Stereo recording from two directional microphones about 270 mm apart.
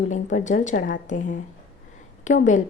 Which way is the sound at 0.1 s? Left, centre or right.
Left.